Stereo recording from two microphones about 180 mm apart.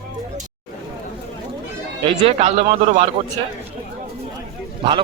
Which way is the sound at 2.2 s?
35° right (ahead or behind).